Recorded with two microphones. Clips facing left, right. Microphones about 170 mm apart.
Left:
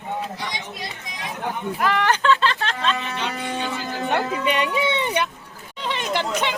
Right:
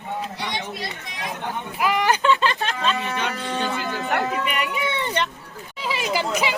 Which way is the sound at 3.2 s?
20° left (ahead or behind).